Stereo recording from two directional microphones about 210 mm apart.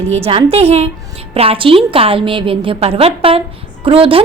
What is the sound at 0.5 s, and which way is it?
A woman's voice, 30° right (ahead or behind).